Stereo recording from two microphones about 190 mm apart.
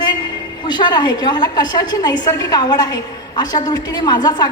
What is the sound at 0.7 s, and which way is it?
A woman's voice, 25° left (ahead or behind).